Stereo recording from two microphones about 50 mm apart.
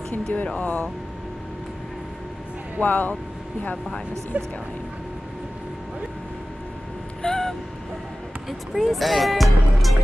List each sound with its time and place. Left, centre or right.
0.1 s speech: left
2.8 s speech: left
4.3 s speech: right
7.2 s a sound: centre
8.5 s speech: centre